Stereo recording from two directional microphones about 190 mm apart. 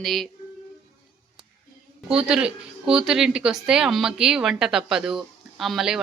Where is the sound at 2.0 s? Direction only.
5° right (ahead or behind).